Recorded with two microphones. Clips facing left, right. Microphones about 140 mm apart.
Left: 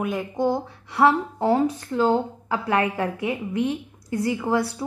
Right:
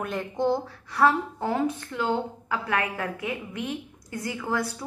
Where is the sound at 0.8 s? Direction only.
25° left (ahead or behind).